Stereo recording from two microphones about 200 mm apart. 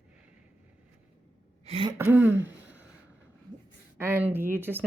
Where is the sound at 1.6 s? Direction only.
25° right (ahead or behind).